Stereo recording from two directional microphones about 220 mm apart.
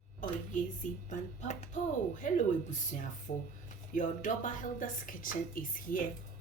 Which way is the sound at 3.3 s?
35° left (ahead or behind).